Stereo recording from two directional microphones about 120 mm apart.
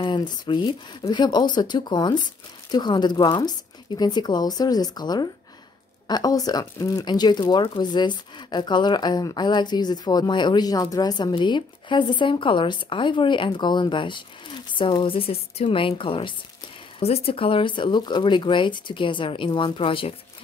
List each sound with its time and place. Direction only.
0.0 s speech: 35° left (ahead or behind)